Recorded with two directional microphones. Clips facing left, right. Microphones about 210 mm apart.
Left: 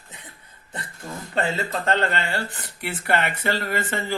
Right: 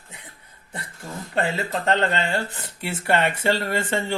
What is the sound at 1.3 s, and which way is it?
Speech, 15° right (ahead or behind).